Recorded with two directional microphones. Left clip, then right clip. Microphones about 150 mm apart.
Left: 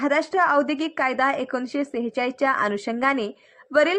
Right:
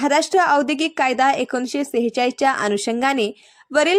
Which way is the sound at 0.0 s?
35° right (ahead or behind).